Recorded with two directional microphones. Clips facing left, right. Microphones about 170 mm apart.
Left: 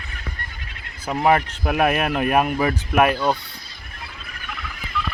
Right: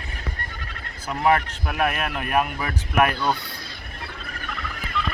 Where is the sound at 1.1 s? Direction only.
20° left (ahead or behind).